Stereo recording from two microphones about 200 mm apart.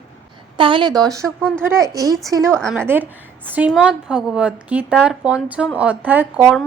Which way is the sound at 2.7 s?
10° right (ahead or behind).